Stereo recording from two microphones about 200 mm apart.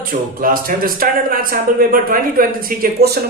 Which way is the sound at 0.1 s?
45° right (ahead or behind).